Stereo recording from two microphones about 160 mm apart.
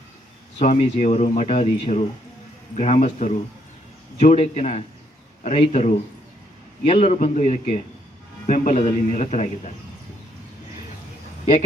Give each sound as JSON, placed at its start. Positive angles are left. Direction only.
{"t": 0.6, "sound": "speech", "side_deg": 45}